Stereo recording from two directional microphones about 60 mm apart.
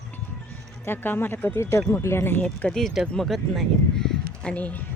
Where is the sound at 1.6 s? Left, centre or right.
Left.